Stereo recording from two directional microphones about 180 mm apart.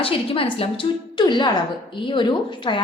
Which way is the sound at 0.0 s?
30° left (ahead or behind).